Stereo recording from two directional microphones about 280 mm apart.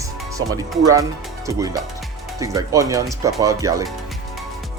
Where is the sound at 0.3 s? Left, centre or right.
Centre.